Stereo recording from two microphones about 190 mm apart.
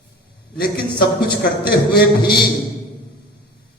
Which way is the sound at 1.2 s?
55° left (ahead or behind).